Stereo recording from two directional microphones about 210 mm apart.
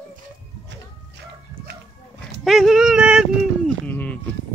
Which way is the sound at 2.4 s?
Centre (ahead or behind).